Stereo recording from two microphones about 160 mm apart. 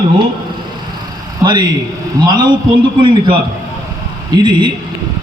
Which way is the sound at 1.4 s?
25° right (ahead or behind).